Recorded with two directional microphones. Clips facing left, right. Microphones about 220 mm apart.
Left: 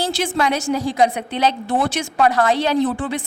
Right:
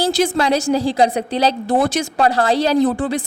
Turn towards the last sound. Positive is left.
turn(degrees=-35)  # may be behind; listen again after turning